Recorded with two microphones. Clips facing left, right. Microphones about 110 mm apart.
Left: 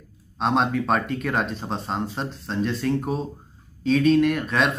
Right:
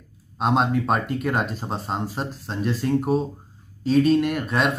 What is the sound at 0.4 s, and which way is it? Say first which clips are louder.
Speech: right 1 dB; 5° right (ahead or behind).